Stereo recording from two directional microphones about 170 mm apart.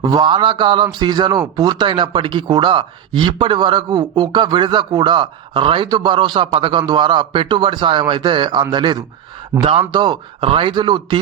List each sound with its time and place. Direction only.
0.0 s a man's voice: 25° right (ahead or behind)